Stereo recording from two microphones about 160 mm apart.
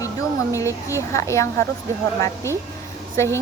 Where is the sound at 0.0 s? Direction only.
20° left (ahead or behind).